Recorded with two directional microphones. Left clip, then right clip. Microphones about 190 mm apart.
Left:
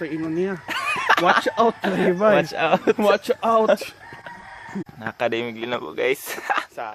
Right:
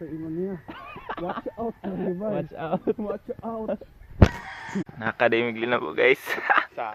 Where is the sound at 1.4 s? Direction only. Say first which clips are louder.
Left 13 dB; 40° left (ahead or behind).